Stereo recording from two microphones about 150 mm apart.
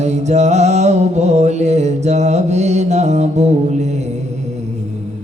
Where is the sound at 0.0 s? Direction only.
50° right (ahead or behind).